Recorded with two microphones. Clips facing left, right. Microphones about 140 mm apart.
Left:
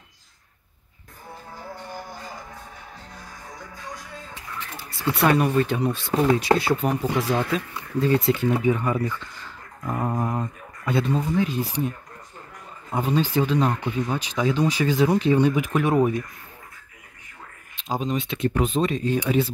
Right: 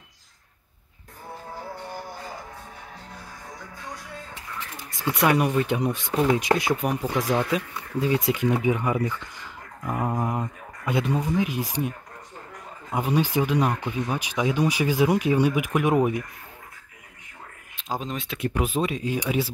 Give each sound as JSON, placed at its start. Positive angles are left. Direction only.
{"t": 4.7, "sound": "speech", "side_deg": -15}
{"t": 12.9, "sound": "speech", "side_deg": -15}
{"t": 17.7, "sound": "speech", "side_deg": 0}